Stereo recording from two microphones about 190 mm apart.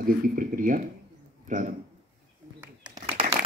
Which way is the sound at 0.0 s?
45° right (ahead or behind).